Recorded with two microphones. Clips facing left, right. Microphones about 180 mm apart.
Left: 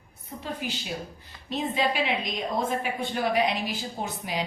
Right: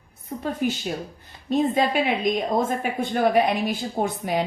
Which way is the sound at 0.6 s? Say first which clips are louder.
Right 8 dB; 50° right (ahead or behind).